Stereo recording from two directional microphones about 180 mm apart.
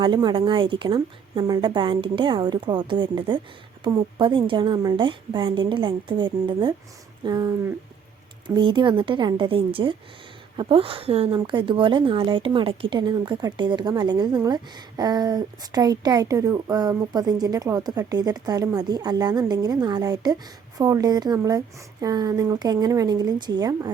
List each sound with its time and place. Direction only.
0.0 s speech: 25° right (ahead or behind)